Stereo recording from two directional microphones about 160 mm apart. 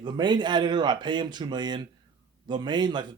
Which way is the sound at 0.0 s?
25° right (ahead or behind).